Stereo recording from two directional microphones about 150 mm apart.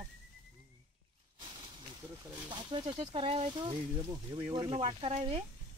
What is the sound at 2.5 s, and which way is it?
Speech, 35° right (ahead or behind).